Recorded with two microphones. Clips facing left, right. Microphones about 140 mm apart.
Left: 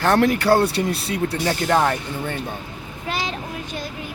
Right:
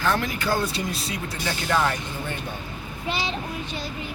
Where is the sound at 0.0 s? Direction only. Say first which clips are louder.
Left 8 dB; 70° left (ahead or behind).